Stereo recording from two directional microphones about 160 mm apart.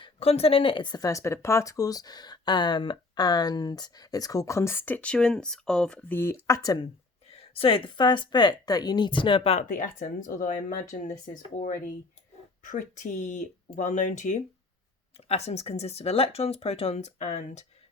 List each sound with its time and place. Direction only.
0.0 s speech: 40° left (ahead or behind); by 6.7 s 20° left (ahead or behind)
7.3 s speech: 40° left (ahead or behind)
9.6 s speech: 55° left (ahead or behind)
12.6 s speech: 50° left (ahead or behind)